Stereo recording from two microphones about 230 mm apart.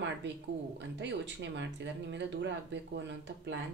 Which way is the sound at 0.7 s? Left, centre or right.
Right.